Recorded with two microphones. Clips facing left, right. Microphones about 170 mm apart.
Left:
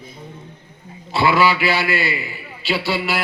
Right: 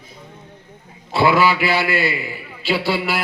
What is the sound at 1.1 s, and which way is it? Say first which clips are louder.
A man's voice: right 1 dB; 50° right (ahead or behind).